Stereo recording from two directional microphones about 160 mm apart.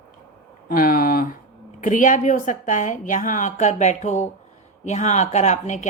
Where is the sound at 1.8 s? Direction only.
55° left (ahead or behind).